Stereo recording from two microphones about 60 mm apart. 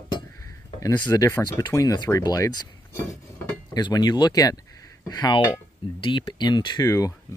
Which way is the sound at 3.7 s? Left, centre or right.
Left.